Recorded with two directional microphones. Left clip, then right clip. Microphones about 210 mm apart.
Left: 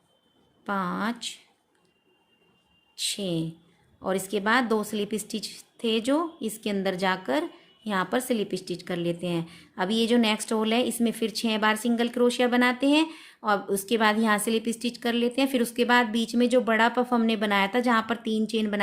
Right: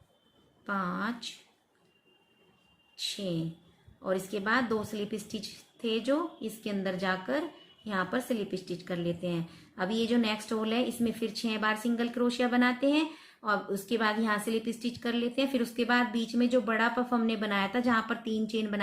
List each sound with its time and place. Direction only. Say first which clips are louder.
0.6 s a woman's voice: left 4 dB; 55° left (ahead or behind)
2.9 s a sound: left 5 dB; 55° left (ahead or behind)
4.0 s a woman's voice: left 5 dB; 55° left (ahead or behind)